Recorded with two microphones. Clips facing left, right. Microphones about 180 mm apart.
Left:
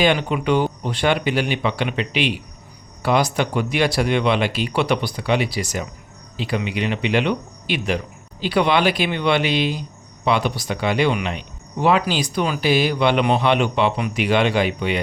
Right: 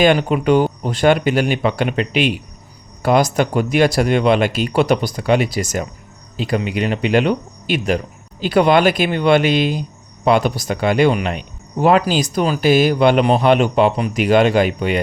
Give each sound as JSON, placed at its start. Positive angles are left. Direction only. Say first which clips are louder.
{"t": 0.0, "sound": "speech", "louder": "right 5 dB", "side_deg": -45}